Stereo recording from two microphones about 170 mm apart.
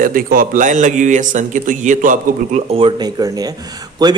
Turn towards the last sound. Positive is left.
turn(degrees=-20)  # may be behind; listen again after turning